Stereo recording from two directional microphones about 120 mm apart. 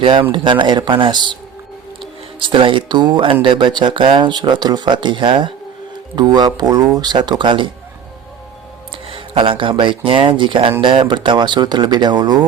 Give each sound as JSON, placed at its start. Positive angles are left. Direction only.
{"t": 0.0, "sound": "speech", "side_deg": -45}
{"t": 2.4, "sound": "speech", "side_deg": -45}
{"t": 9.0, "sound": "speech", "side_deg": -50}